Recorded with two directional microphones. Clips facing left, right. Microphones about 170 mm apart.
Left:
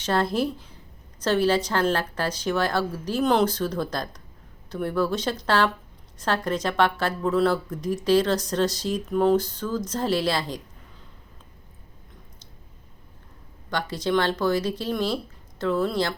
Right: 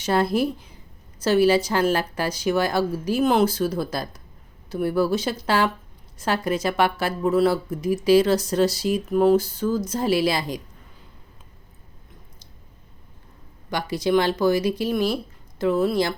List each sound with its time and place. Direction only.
0.0 s speech: 10° right (ahead or behind)
13.7 s speech: 10° right (ahead or behind)